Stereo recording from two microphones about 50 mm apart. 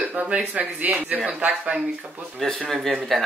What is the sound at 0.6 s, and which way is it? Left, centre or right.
A man's voice, right.